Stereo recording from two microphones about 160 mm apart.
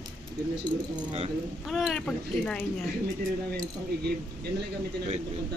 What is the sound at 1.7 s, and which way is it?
Speech, centre (ahead or behind).